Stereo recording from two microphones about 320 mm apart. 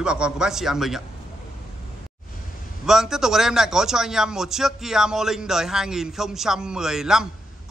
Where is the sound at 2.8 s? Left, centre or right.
Centre.